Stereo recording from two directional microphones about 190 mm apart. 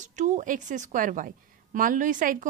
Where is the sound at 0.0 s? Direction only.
40° right (ahead or behind).